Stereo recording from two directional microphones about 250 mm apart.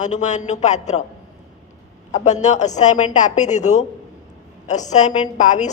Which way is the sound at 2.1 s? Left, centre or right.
Left.